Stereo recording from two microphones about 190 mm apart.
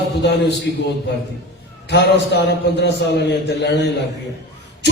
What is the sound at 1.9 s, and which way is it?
A man's voice, 65° left (ahead or behind).